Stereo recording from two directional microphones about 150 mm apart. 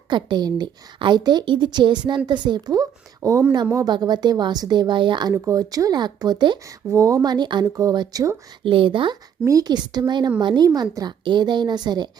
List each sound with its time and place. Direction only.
0.1 s a woman's voice: 30° right (ahead or behind)
8.6 s a woman's voice: 35° right (ahead or behind)
9.4 s a woman's voice: 20° right (ahead or behind)